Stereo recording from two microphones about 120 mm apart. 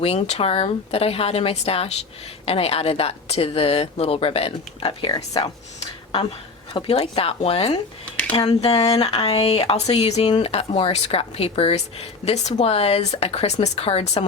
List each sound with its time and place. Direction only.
0.0 s speech: 60° left (ahead or behind); by 5.5 s 40° left (ahead or behind)
6.8 s speech: 55° left (ahead or behind)
10.2 s speech: 40° left (ahead or behind)
10.5 s speech: 55° left (ahead or behind)